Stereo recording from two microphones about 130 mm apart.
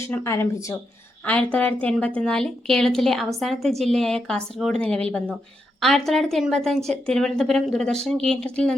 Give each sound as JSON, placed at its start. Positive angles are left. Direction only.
{"t": 0.0, "sound": "speech", "side_deg": 20}
{"t": 1.2, "sound": "a woman's voice", "side_deg": 10}